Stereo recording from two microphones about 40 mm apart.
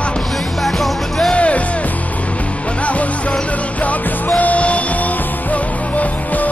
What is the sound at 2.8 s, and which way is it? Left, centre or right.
Music, left.